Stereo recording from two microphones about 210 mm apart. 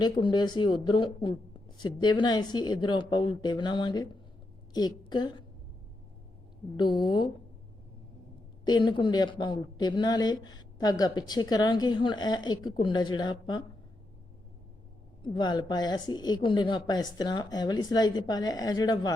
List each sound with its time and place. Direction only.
0.0 s a woman's voice: 20° left (ahead or behind)
6.9 s speech: 20° left (ahead or behind)
8.6 s speech: 20° left (ahead or behind)
15.2 s speech: 20° left (ahead or behind)